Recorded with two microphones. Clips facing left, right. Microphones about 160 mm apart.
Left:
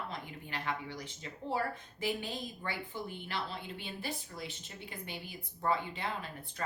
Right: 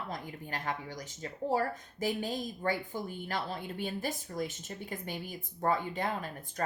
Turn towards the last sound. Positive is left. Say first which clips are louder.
# right 3 dB
turn(degrees=-45)  # may be behind; listen again after turning